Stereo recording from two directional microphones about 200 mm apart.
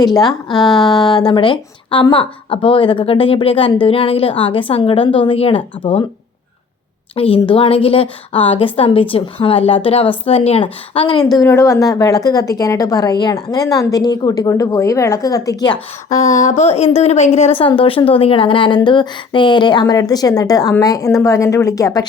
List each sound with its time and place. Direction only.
0.0 s a woman's voice: 20° left (ahead or behind)
7.2 s a woman's voice: 25° left (ahead or behind)
11.3 s a woman's voice: 15° left (ahead or behind)
16.0 s a woman's voice: 40° left (ahead or behind); by 22.0 s 15° left (ahead or behind)